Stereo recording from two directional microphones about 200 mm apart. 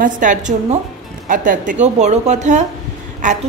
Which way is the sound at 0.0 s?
40° right (ahead or behind).